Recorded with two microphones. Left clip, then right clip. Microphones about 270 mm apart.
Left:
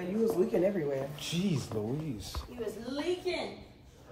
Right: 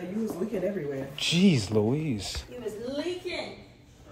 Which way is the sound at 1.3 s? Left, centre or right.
Right.